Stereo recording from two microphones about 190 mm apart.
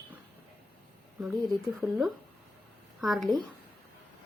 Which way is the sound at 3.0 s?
Centre (ahead or behind).